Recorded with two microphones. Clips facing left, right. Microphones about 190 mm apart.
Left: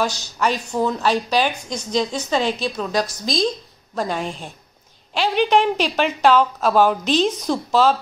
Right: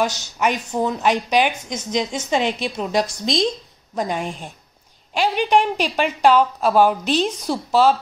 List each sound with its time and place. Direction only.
0.0 s a woman's voice: 15° right (ahead or behind)